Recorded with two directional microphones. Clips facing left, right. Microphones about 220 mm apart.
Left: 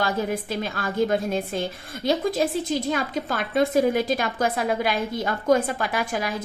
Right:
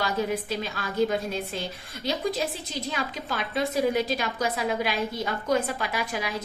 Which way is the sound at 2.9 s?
50° left (ahead or behind).